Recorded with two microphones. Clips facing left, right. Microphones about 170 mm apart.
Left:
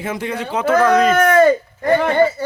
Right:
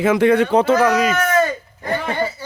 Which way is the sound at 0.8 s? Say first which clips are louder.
Left 3 dB; 10° right (ahead or behind).